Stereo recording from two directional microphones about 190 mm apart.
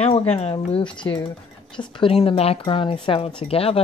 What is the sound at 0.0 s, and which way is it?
Speech, 30° left (ahead or behind).